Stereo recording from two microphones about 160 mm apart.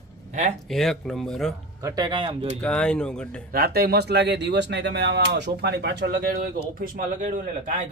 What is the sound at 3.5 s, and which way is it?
Speech, 75° right (ahead or behind).